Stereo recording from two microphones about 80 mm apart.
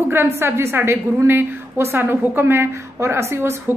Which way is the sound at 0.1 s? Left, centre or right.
Right.